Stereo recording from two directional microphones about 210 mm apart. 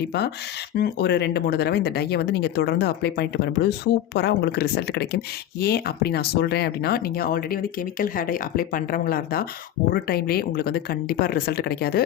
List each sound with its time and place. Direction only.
0.8 s speech: 50° left (ahead or behind)